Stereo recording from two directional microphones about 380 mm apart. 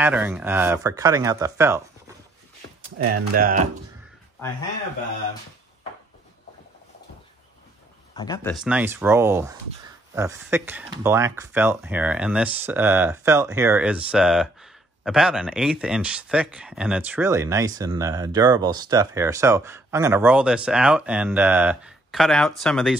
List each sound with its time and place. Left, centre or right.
0.0 s speech: centre
3.3 s speech: right
8.1 s speech: centre
8.5 s speech: centre